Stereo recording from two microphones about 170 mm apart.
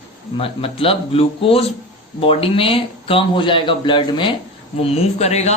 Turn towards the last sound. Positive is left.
turn(degrees=40)  # may be behind; listen again after turning